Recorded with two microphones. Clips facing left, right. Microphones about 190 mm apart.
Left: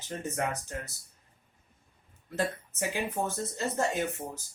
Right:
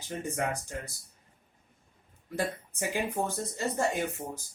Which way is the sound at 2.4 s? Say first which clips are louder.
Left 1 dB; 15° right (ahead or behind).